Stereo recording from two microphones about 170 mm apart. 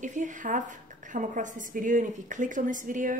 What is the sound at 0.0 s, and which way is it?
A woman's voice, 45° right (ahead or behind).